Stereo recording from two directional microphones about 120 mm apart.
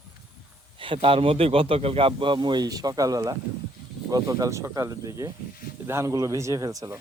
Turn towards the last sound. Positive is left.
turn(degrees=-30)  # may be behind; listen again after turning